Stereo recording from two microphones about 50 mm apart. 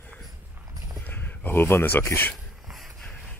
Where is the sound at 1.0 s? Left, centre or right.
Left.